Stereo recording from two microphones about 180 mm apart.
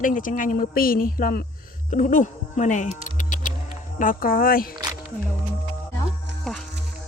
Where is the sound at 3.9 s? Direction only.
50° left (ahead or behind).